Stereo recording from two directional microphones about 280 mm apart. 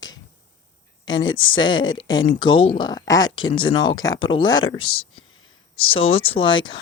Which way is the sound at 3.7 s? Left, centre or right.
Centre.